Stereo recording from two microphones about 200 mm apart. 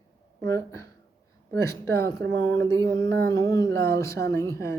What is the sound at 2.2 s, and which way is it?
Speech, 80° right.